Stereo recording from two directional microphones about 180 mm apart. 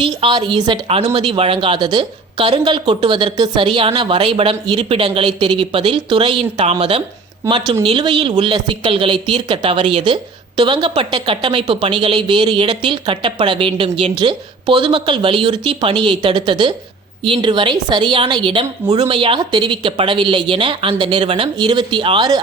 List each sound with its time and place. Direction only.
0.0 s a woman's voice: 25° right (ahead or behind)